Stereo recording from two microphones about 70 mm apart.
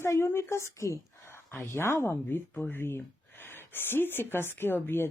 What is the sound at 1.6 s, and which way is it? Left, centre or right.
Speech, left.